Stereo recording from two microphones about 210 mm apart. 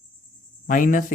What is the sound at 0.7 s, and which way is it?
Speech, 40° left (ahead or behind).